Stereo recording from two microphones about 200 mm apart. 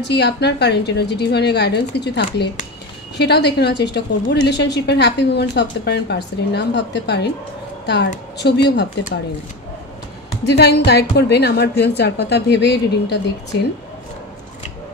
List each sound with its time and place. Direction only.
0.0 s a woman's voice: 55° left (ahead or behind)
10.4 s a woman's voice: 55° left (ahead or behind)